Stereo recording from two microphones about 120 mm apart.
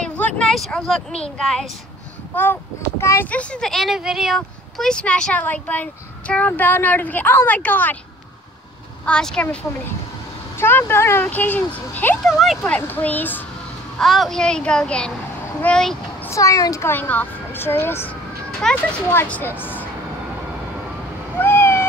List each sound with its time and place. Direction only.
0.0 s a sound: 10° left (ahead or behind)
0.4 s speech: 5° left (ahead or behind)
2.3 s speech: 15° left (ahead or behind)
3.3 s speech: 10° left (ahead or behind)
9.0 s speech: 5° left (ahead or behind)
12.3 s speech: centre (ahead or behind)
12.6 s speech: 15° left (ahead or behind)
13.9 s speech: centre (ahead or behind)
16.3 s speech: 25° left (ahead or behind)
18.6 s speech: centre (ahead or behind)
19.0 s speech: 15° left (ahead or behind)
21.4 s owl: 20° left (ahead or behind)